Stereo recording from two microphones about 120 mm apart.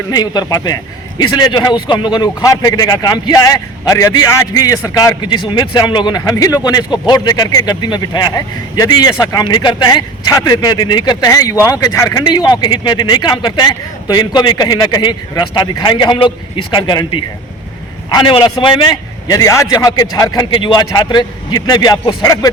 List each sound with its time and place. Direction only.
0.1 s a man's voice: 35° left (ahead or behind)
19.3 s a man's voice: 25° left (ahead or behind)